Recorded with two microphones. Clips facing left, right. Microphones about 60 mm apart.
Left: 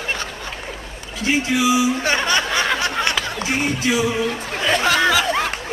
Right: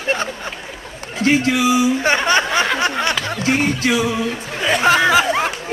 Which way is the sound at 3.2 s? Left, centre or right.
Right.